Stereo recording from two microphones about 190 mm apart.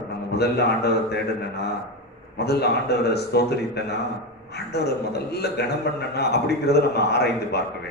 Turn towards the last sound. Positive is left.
turn(degrees=60)  # may be behind; listen again after turning